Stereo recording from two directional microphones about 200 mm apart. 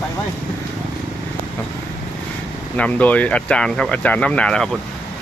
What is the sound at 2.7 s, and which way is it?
Speech, 5° left (ahead or behind).